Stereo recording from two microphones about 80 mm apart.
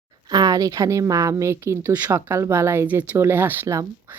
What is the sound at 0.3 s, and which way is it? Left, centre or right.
Speech, right.